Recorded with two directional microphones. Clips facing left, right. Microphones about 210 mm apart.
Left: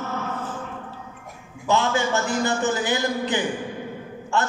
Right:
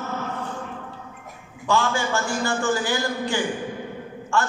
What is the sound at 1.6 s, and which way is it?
A man's voice, 20° left (ahead or behind).